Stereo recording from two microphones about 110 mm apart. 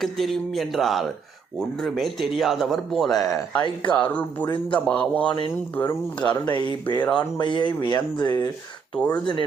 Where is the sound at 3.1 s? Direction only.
30° left (ahead or behind).